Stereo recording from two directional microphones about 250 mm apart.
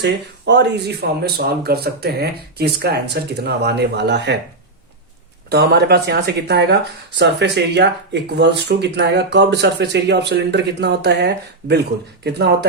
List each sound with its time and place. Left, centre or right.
0.0 s speech: right
5.5 s speech: right